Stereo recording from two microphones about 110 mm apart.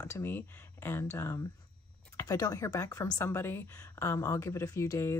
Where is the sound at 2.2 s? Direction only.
30° left (ahead or behind).